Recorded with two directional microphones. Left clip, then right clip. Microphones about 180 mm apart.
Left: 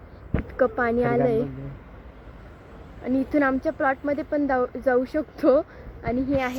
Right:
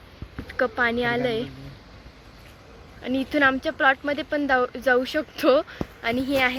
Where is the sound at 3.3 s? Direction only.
10° right (ahead or behind).